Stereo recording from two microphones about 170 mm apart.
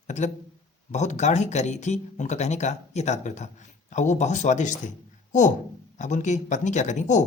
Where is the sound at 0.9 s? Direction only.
45° left (ahead or behind).